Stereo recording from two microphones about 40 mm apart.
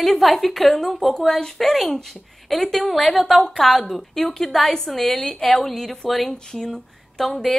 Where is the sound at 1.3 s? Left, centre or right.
Centre.